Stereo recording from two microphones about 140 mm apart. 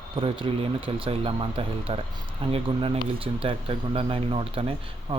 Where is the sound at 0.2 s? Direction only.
40° right (ahead or behind).